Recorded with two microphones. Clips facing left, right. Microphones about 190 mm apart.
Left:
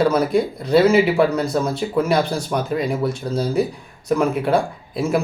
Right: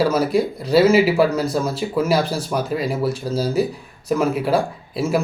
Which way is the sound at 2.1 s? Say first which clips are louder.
Even; 35° right (ahead or behind).